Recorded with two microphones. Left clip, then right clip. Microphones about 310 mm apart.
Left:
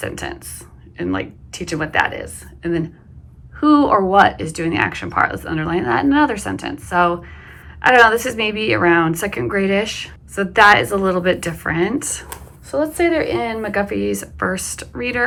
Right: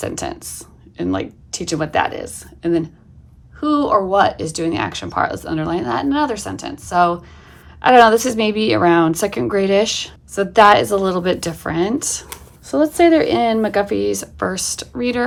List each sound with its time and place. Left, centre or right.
0.0 s a woman's voice: centre